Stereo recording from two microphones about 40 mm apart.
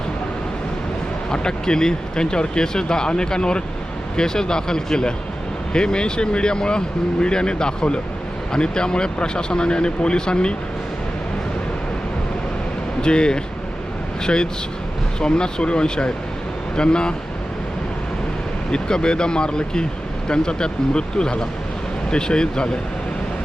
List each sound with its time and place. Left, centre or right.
1.3 s speech: centre
13.0 s speech: left
18.7 s speech: centre